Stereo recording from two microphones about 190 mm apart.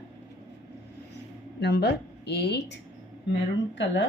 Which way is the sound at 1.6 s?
60° left (ahead or behind).